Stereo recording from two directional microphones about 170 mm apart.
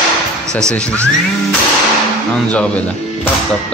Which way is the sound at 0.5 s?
15° right (ahead or behind).